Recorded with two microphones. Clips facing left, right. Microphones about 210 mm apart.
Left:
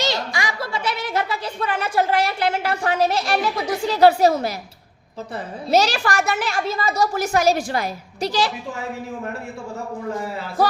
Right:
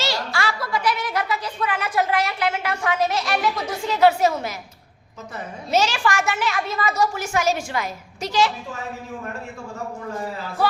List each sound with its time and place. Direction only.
0.0 s a sound: 15° left (ahead or behind)
0.6 s a woman's voice: 25° left (ahead or behind)
5.7 s a woman's voice: 40° left (ahead or behind)